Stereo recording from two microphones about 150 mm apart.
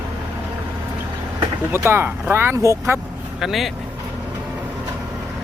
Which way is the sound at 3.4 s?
Centre (ahead or behind).